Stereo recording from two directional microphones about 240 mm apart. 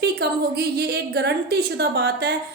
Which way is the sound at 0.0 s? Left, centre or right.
Right.